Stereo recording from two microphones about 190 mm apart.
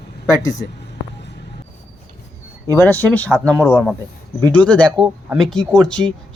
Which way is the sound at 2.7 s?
10° left (ahead or behind).